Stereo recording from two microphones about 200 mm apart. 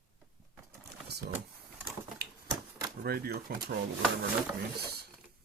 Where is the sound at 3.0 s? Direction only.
50° right (ahead or behind).